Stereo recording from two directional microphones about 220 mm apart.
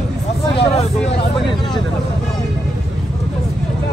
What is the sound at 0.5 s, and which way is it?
Speech, 25° left (ahead or behind).